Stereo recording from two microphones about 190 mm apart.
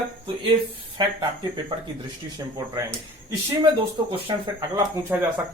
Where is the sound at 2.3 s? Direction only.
15° right (ahead or behind).